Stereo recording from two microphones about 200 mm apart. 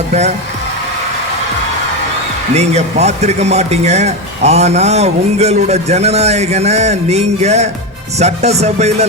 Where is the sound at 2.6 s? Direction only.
35° right (ahead or behind).